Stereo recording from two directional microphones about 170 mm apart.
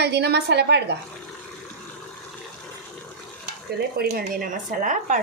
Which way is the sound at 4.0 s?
60° right (ahead or behind).